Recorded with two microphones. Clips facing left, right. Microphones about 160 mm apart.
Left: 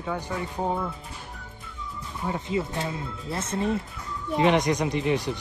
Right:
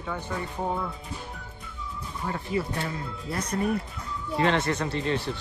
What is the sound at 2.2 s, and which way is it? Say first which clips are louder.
Speech: left 2 dB; 20° left (ahead or behind).